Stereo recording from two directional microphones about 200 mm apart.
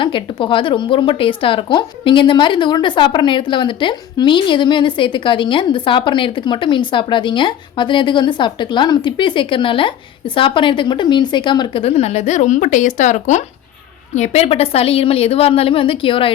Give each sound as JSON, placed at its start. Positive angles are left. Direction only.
{"t": 0.0, "sound": "speech", "side_deg": 25}